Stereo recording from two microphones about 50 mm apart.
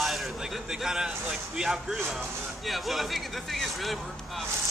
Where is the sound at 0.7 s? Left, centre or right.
Centre.